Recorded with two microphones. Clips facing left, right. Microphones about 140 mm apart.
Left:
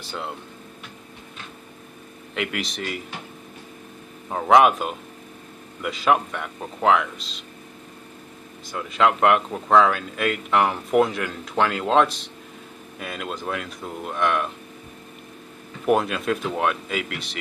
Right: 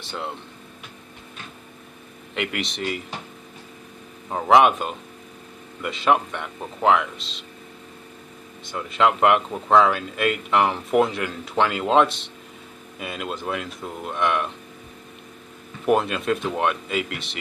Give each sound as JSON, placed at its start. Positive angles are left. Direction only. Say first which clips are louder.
{"t": 0.0, "sound": "speech", "louder": "right 1 dB", "side_deg": 0}
{"t": 2.3, "sound": "speech", "louder": "even", "side_deg": 0}
{"t": 4.3, "sound": "speech", "louder": "even", "side_deg": 0}
{"t": 8.6, "sound": "speech", "louder": "even", "side_deg": 0}
{"t": 15.8, "sound": "speech", "louder": "even", "side_deg": 0}